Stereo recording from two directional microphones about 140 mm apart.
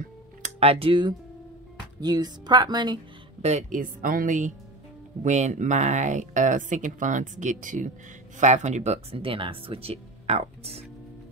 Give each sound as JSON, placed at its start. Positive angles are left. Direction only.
{"t": 0.4, "sound": "speech", "side_deg": -45}
{"t": 3.4, "sound": "a woman's voice", "side_deg": -60}
{"t": 5.2, "sound": "speech", "side_deg": -60}